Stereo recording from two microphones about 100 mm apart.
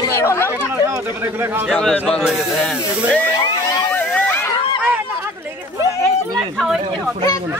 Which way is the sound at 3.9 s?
15° left (ahead or behind).